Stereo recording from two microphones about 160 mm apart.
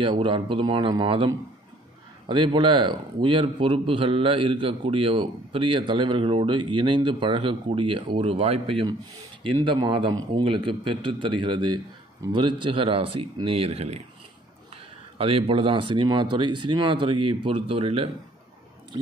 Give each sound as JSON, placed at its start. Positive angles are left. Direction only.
{"t": 0.0, "sound": "a man's voice", "side_deg": -30}
{"t": 15.1, "sound": "a man's voice", "side_deg": -35}